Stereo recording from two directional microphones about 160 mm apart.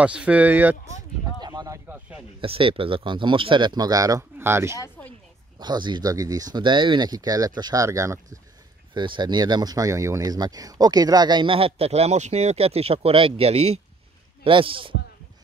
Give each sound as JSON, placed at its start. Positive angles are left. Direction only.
{"t": 0.0, "sound": "speech", "side_deg": -5}
{"t": 1.4, "sound": "speech", "side_deg": -25}
{"t": 1.9, "sound": "speech", "side_deg": -10}
{"t": 2.4, "sound": "speech", "side_deg": -35}
{"t": 4.7, "sound": "a sound", "side_deg": 15}
{"t": 5.6, "sound": "speech", "side_deg": -25}
{"t": 8.9, "sound": "a man's voice", "side_deg": -30}